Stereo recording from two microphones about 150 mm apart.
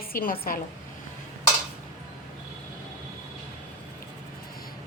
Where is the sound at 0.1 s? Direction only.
70° left (ahead or behind).